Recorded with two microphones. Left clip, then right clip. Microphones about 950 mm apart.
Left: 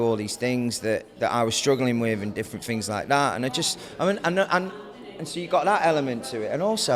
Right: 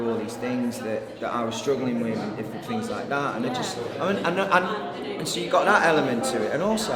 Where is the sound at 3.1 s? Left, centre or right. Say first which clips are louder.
Left 5 dB; left.